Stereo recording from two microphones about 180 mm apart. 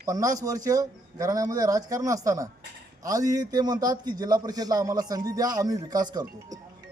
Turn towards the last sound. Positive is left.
turn(degrees=-20)  # may be behind; listen again after turning